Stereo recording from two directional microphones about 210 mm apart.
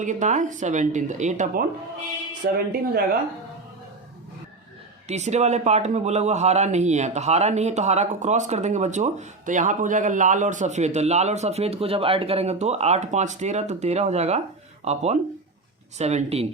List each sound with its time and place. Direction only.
0.0 s a man's voice: 35° right (ahead or behind)
2.4 s speech: 45° right (ahead or behind)
5.0 s a man's voice: 30° right (ahead or behind)